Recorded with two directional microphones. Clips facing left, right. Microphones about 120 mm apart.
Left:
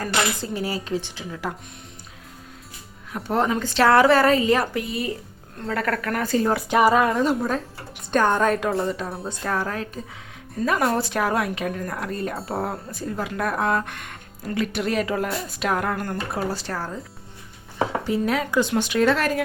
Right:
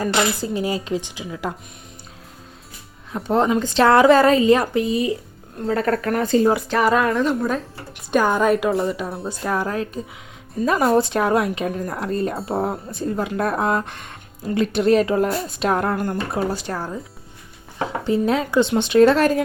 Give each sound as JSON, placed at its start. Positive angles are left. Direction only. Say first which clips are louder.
{"t": 0.0, "sound": "speech", "louder": "right 4 dB", "side_deg": -15}
{"t": 3.1, "sound": "speech", "louder": "right 4 dB", "side_deg": -25}
{"t": 6.7, "sound": "speech", "louder": "left 1 dB", "side_deg": 15}
{"t": 6.9, "sound": "a woman's voice", "louder": "right 1 dB", "side_deg": 5}
{"t": 9.3, "sound": "speech", "louder": "right 4 dB", "side_deg": -15}
{"t": 16.0, "sound": "speech", "louder": "right 4 dB", "side_deg": -20}
{"t": 18.0, "sound": "speech", "louder": "right 8 dB", "side_deg": -25}